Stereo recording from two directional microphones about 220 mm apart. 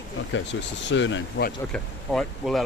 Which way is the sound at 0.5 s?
55° left (ahead or behind).